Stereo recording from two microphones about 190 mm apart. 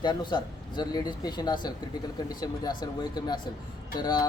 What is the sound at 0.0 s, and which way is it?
Speech, 25° left (ahead or behind).